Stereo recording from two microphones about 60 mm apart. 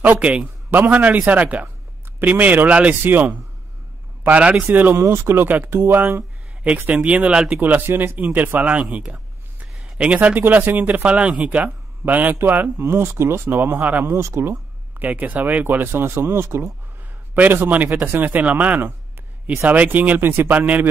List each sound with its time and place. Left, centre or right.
0.0 s speech: right
4.2 s speech: right
4.9 s speech: right
5.9 s speech: right
6.6 s speech: right
7.6 s speech: right
8.5 s speech: right
10.4 s speech: right
13.7 s speech: right
14.0 s speech: right
14.5 s speech: right
15.6 s speech: right
17.3 s speech: right